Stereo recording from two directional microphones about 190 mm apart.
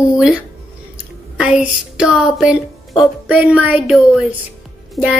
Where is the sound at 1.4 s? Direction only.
5° right (ahead or behind).